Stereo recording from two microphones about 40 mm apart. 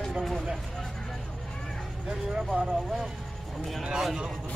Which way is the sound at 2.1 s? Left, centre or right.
Centre.